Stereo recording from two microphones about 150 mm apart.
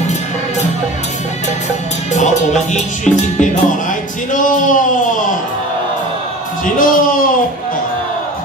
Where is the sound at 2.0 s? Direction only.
50° left (ahead or behind).